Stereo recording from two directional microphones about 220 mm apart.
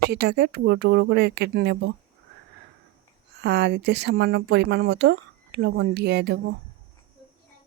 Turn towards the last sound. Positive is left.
turn(degrees=-50)  # may be behind; listen again after turning